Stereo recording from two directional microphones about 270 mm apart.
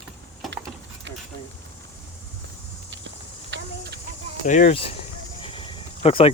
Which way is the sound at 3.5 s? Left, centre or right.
Right.